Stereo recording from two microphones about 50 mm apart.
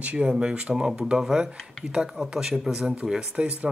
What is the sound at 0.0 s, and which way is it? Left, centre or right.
Speech, right.